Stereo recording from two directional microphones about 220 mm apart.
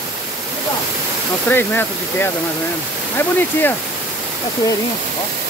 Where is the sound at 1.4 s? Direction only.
10° left (ahead or behind).